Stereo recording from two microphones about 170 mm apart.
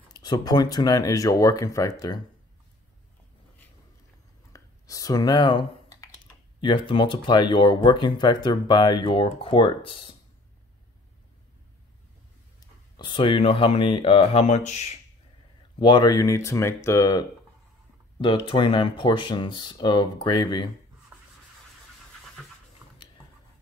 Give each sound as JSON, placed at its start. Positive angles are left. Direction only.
{"t": 0.1, "sound": "speech", "side_deg": 25}
{"t": 4.5, "sound": "speech", "side_deg": 20}
{"t": 12.9, "sound": "speech", "side_deg": 30}
{"t": 15.8, "sound": "speech", "side_deg": 25}
{"t": 18.2, "sound": "speech", "side_deg": 30}